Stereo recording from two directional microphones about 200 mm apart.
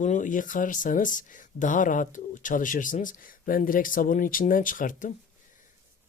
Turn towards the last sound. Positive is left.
turn(degrees=40)  # may be behind; listen again after turning